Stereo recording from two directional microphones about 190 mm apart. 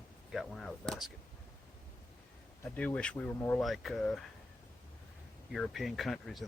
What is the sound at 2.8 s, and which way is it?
Speech, 5° left (ahead or behind).